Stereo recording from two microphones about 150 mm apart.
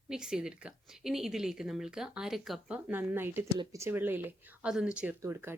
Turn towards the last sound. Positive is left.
turn(degrees=-15)  # may be behind; listen again after turning